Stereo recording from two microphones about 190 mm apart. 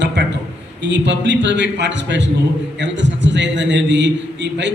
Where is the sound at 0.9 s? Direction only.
70° right (ahead or behind).